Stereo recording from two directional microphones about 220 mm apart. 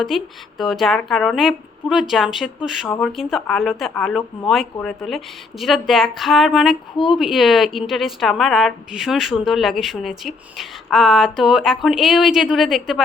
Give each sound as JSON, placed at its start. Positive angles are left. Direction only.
{"t": 0.1, "sound": "a woman's voice", "side_deg": 0}
{"t": 6.9, "sound": "speech", "side_deg": 20}
{"t": 7.2, "sound": "a woman's voice", "side_deg": 0}